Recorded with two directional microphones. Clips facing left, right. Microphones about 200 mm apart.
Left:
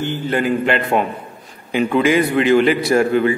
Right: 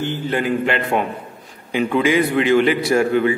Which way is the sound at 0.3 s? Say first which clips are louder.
Left 3 dB; 45° left (ahead or behind).